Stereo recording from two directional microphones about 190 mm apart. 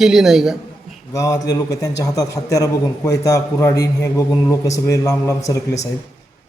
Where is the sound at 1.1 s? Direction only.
20° left (ahead or behind).